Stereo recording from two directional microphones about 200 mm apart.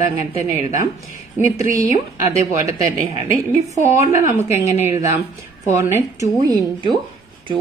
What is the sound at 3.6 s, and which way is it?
Speech, 15° right (ahead or behind).